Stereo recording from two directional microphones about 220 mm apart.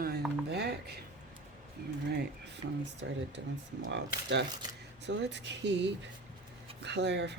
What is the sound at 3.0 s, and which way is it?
Speech, 55° right (ahead or behind).